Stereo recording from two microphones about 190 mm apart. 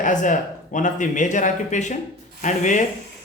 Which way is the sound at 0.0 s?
40° left (ahead or behind).